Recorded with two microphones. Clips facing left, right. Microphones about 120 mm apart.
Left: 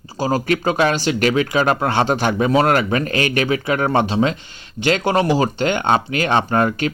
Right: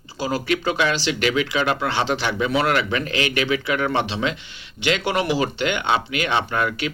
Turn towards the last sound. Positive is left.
turn(degrees=40)  # may be behind; listen again after turning